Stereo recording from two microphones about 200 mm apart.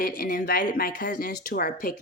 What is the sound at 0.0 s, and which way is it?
Speech, 45° left (ahead or behind).